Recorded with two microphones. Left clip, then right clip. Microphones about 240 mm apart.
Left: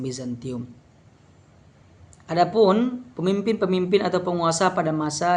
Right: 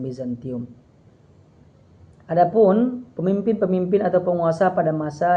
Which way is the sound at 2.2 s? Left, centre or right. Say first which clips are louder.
Right 2 dB; left.